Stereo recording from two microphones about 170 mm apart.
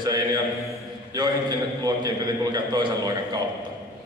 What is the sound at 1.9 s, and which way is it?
A man's voice, 25° right (ahead or behind).